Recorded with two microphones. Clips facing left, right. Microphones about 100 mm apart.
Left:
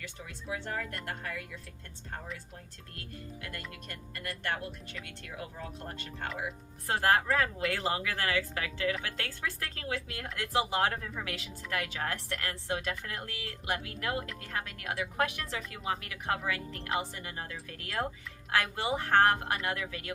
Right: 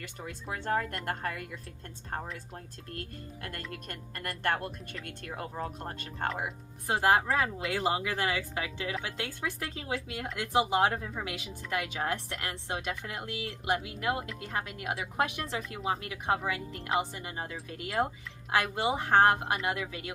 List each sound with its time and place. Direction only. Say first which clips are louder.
0.0 s speech: right 3 dB; 45° right (ahead or behind)
3.7 s speech: right 3 dB; 50° right (ahead or behind)
6.8 s speech: right 2 dB; 15° right (ahead or behind)